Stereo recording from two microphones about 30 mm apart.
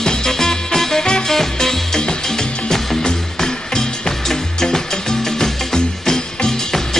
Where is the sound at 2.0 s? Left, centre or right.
Left.